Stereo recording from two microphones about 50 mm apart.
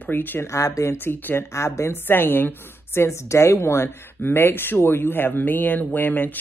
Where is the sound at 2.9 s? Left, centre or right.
Left.